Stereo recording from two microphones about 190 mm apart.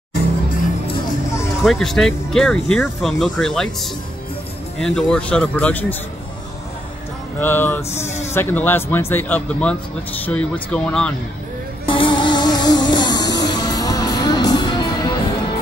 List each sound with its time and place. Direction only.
1.6 s speech: centre (ahead or behind)
7.3 s speech: 10° left (ahead or behind)
11.8 s music: 25° left (ahead or behind)